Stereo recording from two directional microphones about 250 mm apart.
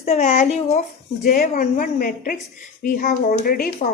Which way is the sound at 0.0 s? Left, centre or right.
Left.